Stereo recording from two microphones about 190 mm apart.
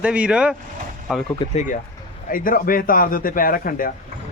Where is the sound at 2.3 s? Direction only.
50° left (ahead or behind).